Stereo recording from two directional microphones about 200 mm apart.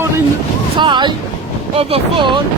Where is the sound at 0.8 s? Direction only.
20° right (ahead or behind).